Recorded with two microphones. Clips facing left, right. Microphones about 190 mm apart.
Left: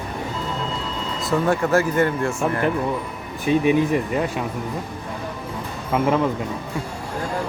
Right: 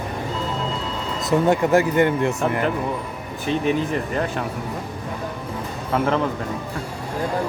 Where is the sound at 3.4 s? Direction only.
10° left (ahead or behind).